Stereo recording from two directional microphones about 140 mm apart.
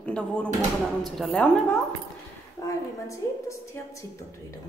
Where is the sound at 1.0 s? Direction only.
Centre (ahead or behind).